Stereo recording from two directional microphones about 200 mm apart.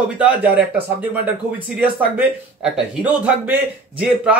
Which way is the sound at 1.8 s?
5° right (ahead or behind).